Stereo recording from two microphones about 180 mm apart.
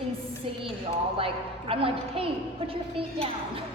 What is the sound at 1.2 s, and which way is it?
Speech, 30° right (ahead or behind).